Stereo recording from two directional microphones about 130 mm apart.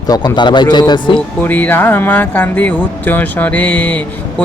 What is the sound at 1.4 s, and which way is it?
Speech, 15° left (ahead or behind).